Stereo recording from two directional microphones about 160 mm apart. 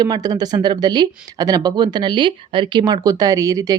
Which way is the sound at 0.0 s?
25° right (ahead or behind).